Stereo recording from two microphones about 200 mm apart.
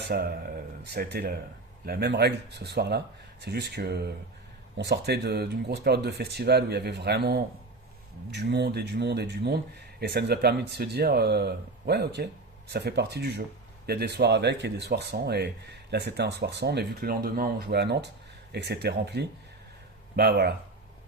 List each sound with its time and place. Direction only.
0.0 s speech: 50° right (ahead or behind)